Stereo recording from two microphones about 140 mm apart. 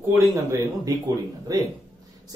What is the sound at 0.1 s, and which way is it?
Speech, 25° right (ahead or behind).